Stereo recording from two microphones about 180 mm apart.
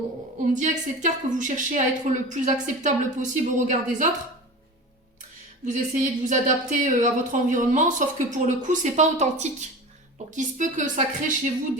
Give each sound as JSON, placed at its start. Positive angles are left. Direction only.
{"t": 0.5, "sound": "speech", "side_deg": -45}
{"t": 5.6, "sound": "speech", "side_deg": -45}